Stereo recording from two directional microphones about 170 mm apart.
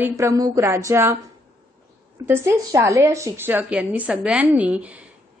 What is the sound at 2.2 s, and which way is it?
A woman's voice, 15° right (ahead or behind).